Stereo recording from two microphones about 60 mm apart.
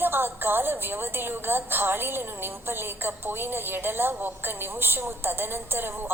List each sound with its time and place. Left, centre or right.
0.0 s a woman's voice: right